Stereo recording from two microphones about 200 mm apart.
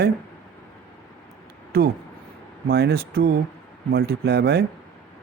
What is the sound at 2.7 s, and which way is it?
Speech, 50° right (ahead or behind).